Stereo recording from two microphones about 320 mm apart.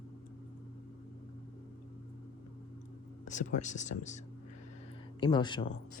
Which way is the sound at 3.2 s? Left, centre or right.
Left.